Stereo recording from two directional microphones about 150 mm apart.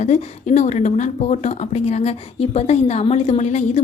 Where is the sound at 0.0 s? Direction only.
50° left (ahead or behind).